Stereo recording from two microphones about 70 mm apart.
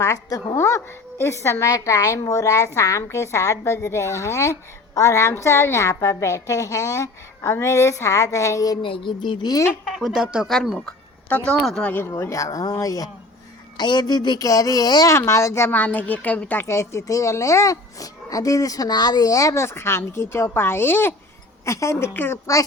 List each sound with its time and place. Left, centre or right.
0.0 s a woman's voice: left
9.2 s speech: left
9.9 s speech: centre
11.8 s a woman's voice: left
12.2 s a woman's voice: left
13.7 s a woman's voice: left
14.4 s a woman's voice: left
15.1 s a woman's voice: left
15.7 s a woman's voice: left
16.6 s a woman's voice: left
19.6 s a woman's voice: left
21.6 s a woman's voice: left